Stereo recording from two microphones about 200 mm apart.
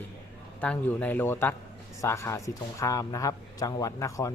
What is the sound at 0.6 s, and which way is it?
Speech, 5° left (ahead or behind).